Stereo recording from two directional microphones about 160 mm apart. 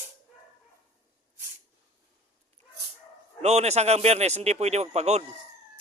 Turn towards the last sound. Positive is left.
turn(degrees=-45)  # may be behind; listen again after turning